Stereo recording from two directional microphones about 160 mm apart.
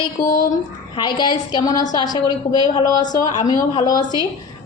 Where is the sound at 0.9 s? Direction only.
30° left (ahead or behind).